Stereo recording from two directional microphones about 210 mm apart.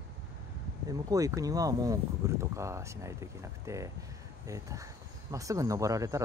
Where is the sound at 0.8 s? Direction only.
15° right (ahead or behind).